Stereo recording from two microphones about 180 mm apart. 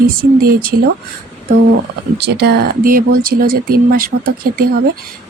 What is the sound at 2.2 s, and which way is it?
Speech, 60° right (ahead or behind).